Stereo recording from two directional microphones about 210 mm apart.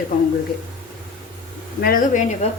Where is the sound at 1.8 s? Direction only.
40° left (ahead or behind).